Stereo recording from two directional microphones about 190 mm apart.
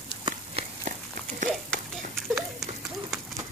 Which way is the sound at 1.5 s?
Centre (ahead or behind).